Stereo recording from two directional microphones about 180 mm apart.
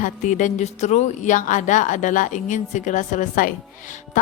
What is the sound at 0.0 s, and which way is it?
A woman's voice, 45° left (ahead or behind).